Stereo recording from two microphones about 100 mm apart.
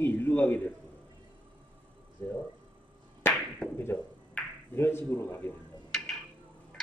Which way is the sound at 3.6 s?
10° left (ahead or behind).